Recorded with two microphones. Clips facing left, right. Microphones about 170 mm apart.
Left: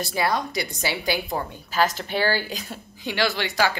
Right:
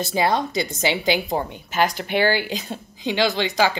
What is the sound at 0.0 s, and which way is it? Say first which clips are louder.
Speech: right 4 dB; 25° right (ahead or behind).